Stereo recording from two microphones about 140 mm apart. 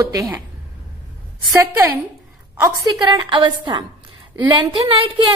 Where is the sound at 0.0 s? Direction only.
25° right (ahead or behind).